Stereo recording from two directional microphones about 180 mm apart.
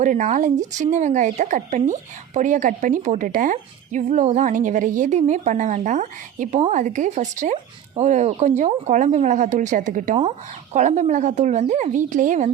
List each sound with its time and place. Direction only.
0.0 s speech: 45° right (ahead or behind)
10.2 s speech: 35° right (ahead or behind)